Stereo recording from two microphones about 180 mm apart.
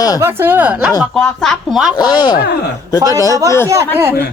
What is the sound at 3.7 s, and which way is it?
Speech, 15° right (ahead or behind).